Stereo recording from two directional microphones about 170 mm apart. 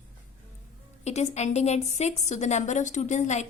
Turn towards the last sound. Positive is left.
turn(degrees=45)  # may be behind; listen again after turning